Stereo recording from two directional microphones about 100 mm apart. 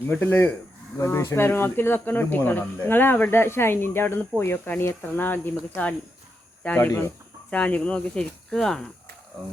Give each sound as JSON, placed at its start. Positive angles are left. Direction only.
{"t": 0.1, "sound": "speech", "side_deg": 20}